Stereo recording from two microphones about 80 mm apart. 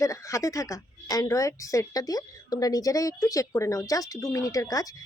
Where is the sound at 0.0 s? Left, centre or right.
Left.